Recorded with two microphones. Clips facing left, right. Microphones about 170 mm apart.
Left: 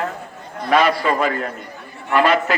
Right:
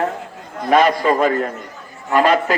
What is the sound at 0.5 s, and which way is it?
A man's voice, 45° right (ahead or behind).